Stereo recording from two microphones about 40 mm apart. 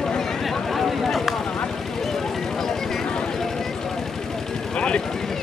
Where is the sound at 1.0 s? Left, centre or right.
Centre.